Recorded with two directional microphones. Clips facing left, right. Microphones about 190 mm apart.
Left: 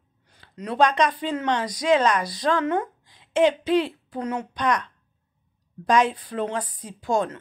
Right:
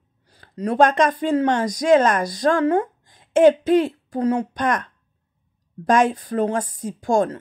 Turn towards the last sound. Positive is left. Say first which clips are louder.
# right 5 dB
turn(degrees=-45)  # may be behind; listen again after turning